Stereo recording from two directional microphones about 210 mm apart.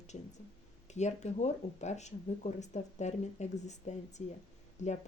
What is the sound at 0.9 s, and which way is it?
Speech, 35° left (ahead or behind).